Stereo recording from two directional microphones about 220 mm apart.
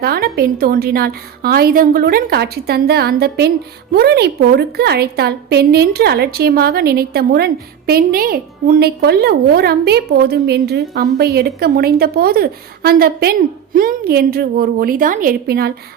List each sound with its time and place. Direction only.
0.0 s a woman's voice: 45° right (ahead or behind)